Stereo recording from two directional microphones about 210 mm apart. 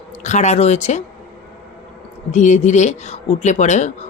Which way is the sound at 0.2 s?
35° left (ahead or behind).